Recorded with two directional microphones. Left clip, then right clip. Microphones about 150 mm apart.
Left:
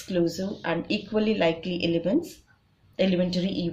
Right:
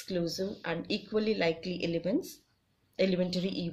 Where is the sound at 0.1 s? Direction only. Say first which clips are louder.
Left 7 dB; 30° right (ahead or behind).